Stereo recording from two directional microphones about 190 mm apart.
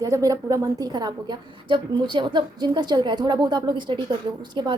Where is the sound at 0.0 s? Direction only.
15° right (ahead or behind).